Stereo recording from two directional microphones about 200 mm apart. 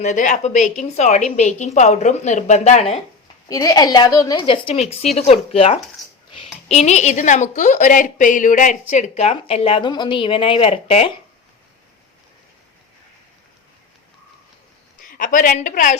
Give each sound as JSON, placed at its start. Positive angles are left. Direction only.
{"t": 0.0, "sound": "speech", "side_deg": 35}
{"t": 3.5, "sound": "a woman's voice", "side_deg": 20}
{"t": 15.0, "sound": "a woman's voice", "side_deg": 40}